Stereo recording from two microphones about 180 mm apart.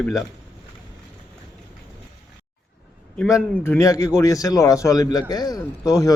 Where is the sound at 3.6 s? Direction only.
15° left (ahead or behind).